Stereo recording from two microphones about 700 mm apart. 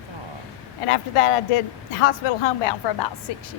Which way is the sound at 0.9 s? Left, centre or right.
Left.